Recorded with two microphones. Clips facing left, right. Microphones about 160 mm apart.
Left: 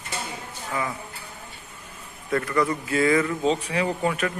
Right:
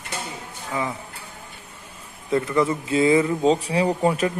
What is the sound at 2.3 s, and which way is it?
A man's voice, 20° right (ahead or behind).